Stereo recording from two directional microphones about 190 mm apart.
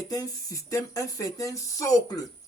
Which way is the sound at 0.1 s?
20° left (ahead or behind).